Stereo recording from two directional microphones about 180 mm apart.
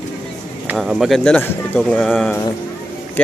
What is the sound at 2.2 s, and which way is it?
Speech, 10° left (ahead or behind).